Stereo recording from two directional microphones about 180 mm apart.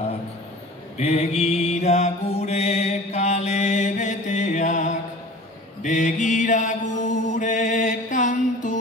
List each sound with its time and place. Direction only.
0.9 s mantra: 35° left (ahead or behind)